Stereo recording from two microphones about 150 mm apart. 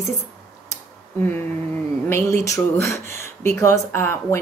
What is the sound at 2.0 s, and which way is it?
Speech, 15° left (ahead or behind).